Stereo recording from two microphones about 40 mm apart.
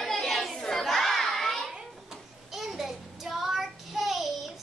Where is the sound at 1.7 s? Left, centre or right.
Centre.